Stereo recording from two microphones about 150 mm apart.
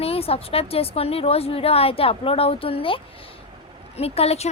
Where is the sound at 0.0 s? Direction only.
40° left (ahead or behind).